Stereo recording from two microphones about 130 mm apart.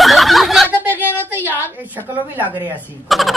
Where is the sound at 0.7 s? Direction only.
15° right (ahead or behind).